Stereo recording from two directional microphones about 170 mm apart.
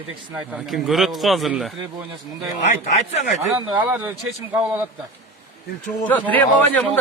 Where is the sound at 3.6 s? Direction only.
25° right (ahead or behind).